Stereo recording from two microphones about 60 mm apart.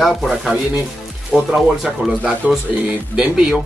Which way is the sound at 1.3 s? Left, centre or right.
Centre.